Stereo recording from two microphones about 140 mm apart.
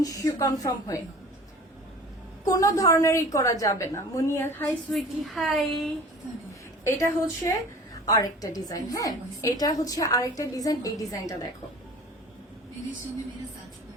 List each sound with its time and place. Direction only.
0.0 s a woman's voice: 25° left (ahead or behind)
2.5 s a woman's voice: 25° left (ahead or behind)
4.9 s a woman's voice: centre (ahead or behind)
6.8 s a woman's voice: 20° left (ahead or behind)